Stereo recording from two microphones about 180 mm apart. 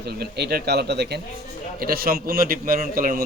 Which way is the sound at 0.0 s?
65° right (ahead or behind).